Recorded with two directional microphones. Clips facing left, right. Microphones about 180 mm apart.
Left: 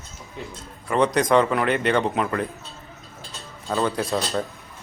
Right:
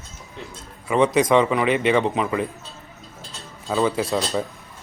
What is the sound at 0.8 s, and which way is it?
A man's voice, 5° right (ahead or behind).